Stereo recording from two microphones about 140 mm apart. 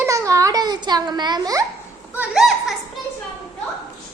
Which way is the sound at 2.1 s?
5° right (ahead or behind).